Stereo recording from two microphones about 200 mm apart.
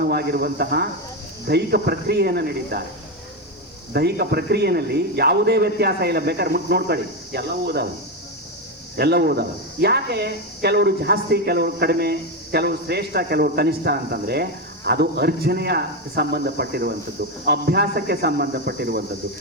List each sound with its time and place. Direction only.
0.1 s speech: 55° right (ahead or behind)
3.9 s speech: 50° right (ahead or behind)
9.0 s speech: 55° right (ahead or behind)